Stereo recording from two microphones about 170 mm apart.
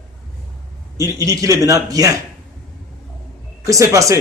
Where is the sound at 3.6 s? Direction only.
20° right (ahead or behind).